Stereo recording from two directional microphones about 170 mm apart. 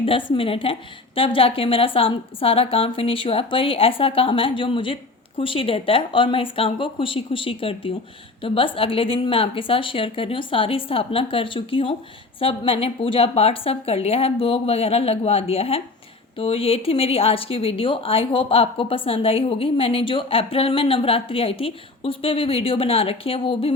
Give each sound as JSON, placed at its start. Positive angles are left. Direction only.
{"t": 0.0, "sound": "a woman's voice", "side_deg": 30}